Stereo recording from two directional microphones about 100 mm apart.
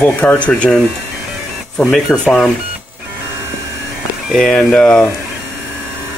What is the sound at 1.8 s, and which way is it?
Speech, 5° left (ahead or behind).